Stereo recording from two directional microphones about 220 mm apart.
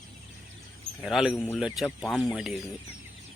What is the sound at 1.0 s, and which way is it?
Speech, centre (ahead or behind).